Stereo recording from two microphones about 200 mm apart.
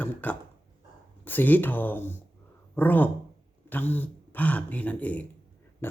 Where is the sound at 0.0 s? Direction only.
10° left (ahead or behind).